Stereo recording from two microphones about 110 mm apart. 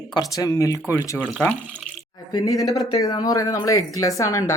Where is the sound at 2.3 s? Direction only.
35° left (ahead or behind).